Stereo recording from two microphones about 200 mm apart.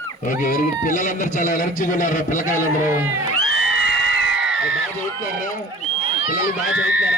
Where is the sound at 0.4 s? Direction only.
40° left (ahead or behind).